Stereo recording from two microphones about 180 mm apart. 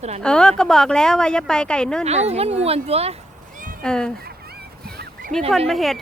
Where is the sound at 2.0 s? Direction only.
35° right (ahead or behind).